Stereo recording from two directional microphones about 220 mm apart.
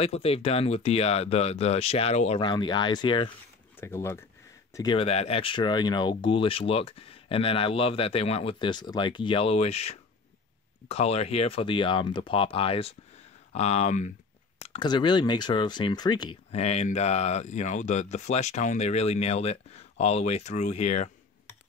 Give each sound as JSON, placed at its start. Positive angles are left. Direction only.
{"t": 0.0, "sound": "speech", "side_deg": 25}